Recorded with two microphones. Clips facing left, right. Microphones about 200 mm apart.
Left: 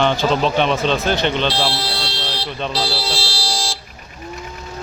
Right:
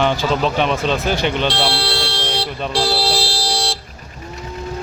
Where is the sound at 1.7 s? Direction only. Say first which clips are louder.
Right 3 dB; 70° right (ahead or behind).